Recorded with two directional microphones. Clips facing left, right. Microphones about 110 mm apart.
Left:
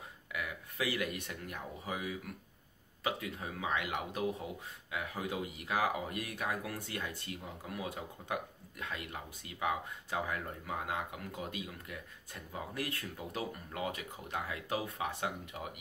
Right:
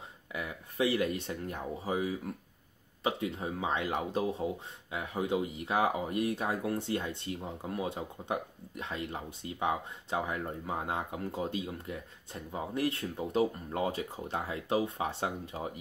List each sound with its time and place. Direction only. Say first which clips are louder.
0.3 s speech: right 2 dB; 25° right (ahead or behind)